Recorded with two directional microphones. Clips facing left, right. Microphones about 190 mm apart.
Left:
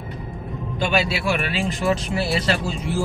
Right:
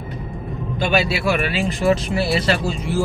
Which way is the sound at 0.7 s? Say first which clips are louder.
Right 2 dB; 10° right (ahead or behind).